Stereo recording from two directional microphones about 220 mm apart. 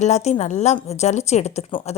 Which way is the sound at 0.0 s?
30° left (ahead or behind).